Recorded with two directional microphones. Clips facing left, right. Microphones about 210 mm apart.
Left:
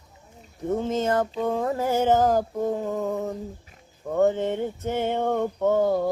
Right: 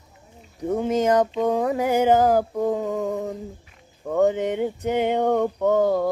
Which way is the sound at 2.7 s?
75° right (ahead or behind).